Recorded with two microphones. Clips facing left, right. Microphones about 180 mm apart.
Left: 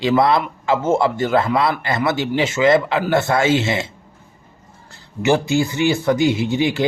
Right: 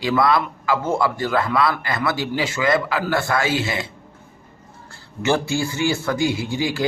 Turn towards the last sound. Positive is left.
turn(degrees=20)  # may be behind; listen again after turning